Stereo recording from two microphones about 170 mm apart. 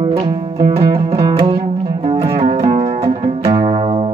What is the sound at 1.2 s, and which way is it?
Music, 25° right (ahead or behind).